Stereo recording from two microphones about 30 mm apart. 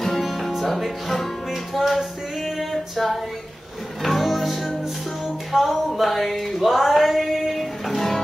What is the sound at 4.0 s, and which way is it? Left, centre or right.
Music, centre.